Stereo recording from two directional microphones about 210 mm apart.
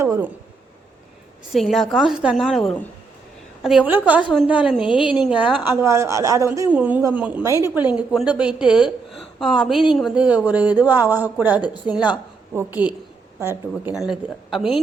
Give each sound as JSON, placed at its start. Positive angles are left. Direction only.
{"t": 0.0, "sound": "speech", "side_deg": -15}
{"t": 1.5, "sound": "a woman's voice", "side_deg": 0}